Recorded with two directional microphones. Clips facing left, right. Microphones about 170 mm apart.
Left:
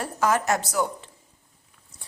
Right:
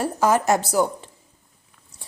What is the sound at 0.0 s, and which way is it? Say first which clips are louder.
Speech: right 4 dB; 30° right (ahead or behind).